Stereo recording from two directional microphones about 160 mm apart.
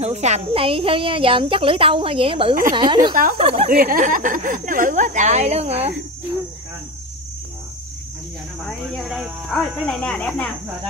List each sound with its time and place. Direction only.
0.0 s a woman's voice: 45° right (ahead or behind)
3.6 s speech: 60° right (ahead or behind); by 5.9 s 40° right (ahead or behind)
8.9 s speech: 5° right (ahead or behind)